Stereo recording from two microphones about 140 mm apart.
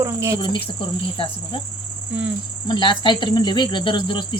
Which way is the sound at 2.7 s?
35° left (ahead or behind).